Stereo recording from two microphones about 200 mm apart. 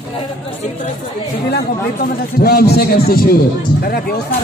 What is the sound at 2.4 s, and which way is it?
Speech, 50° left (ahead or behind).